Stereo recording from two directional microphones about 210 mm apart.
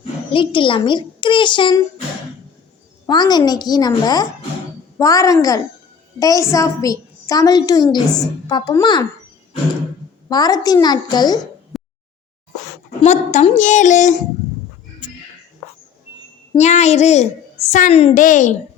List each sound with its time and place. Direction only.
0.3 s a child's voice: 25° left (ahead or behind)
3.1 s a child's voice: 20° left (ahead or behind)
10.2 s a child's voice: 20° left (ahead or behind)
11.7 s a sound: centre (ahead or behind)
13.0 s a woman's voice: 30° left (ahead or behind)
16.6 s a woman's voice: 35° left (ahead or behind)